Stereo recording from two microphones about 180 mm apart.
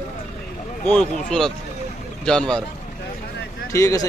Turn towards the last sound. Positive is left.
turn(degrees=15)  # may be behind; listen again after turning